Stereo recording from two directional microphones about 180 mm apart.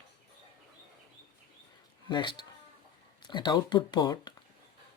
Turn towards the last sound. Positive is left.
turn(degrees=25)  # may be behind; listen again after turning